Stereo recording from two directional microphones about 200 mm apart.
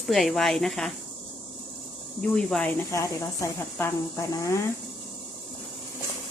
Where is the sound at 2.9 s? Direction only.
15° left (ahead or behind).